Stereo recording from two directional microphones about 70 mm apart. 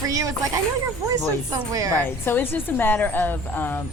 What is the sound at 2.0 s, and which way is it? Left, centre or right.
Speech, left.